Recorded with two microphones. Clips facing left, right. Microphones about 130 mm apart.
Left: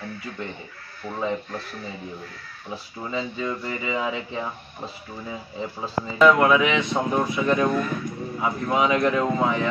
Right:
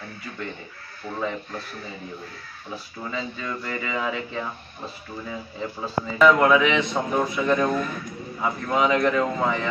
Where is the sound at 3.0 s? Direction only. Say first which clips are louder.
Left 3 dB; 20° left (ahead or behind).